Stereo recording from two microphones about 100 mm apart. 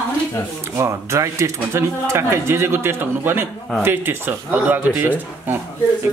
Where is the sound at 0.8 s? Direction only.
30° right (ahead or behind).